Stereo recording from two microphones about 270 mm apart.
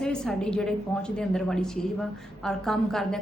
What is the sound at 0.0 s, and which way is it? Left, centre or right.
A woman's voice, centre.